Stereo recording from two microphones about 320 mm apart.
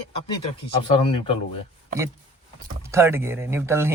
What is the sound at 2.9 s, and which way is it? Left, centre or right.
Speech, centre.